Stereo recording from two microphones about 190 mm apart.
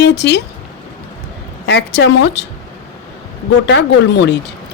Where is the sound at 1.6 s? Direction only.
65° left (ahead or behind).